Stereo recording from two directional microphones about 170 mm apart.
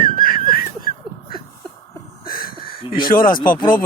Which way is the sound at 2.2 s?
60° left (ahead or behind).